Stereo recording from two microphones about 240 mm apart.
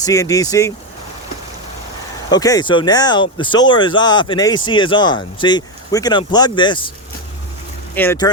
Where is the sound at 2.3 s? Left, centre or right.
Centre.